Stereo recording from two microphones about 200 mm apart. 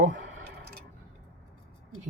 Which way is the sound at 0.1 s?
60° right (ahead or behind).